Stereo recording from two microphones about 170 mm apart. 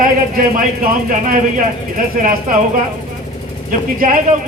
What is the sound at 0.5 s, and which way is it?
Speech, 55° right (ahead or behind).